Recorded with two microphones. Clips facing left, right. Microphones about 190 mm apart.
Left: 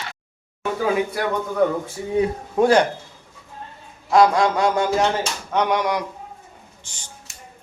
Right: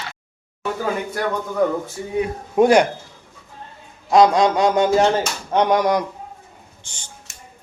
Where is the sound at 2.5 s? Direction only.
15° right (ahead or behind).